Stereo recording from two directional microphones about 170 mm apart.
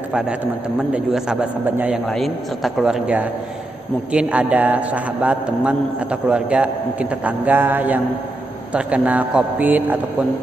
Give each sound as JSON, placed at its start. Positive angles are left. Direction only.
{"t": 0.1, "sound": "a man's voice", "side_deg": -5}